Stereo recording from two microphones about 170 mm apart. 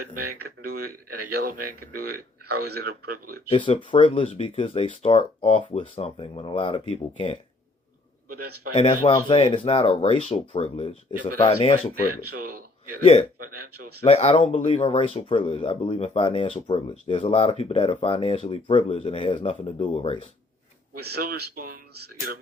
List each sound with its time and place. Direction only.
0.1 s speech: 65° right (ahead or behind)
3.9 s speech: 35° left (ahead or behind)
8.7 s speech: 30° left (ahead or behind)
12.2 s speech: 65° right (ahead or behind)
14.0 s speech: 40° left (ahead or behind)
21.0 s speech: 65° right (ahead or behind)